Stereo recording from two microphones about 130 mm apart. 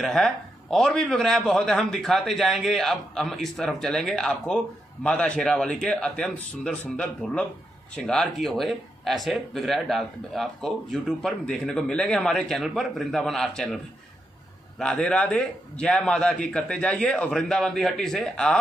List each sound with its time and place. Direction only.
0.0 s a man's voice: 5° left (ahead or behind)
14.8 s a man's voice: 5° left (ahead or behind)